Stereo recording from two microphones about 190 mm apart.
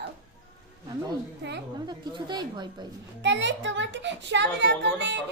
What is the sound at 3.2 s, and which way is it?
A child's voice, 70° right (ahead or behind).